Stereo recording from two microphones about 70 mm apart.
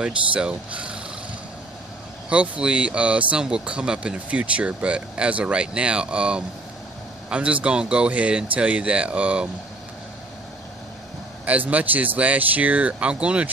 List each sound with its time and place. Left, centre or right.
0.0 s speech: centre
2.2 s speech: centre
11.4 s speech: right